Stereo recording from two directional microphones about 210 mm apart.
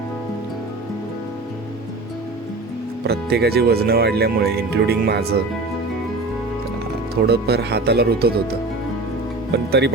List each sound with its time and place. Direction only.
3.0 s speech: 50° right (ahead or behind)
7.3 s speech: 50° right (ahead or behind)
9.5 s speech: 50° right (ahead or behind)